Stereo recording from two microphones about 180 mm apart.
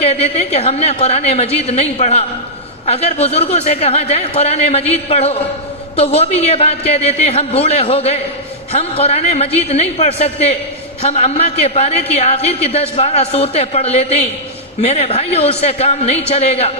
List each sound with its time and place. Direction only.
0.0 s a man's voice: 35° left (ahead or behind)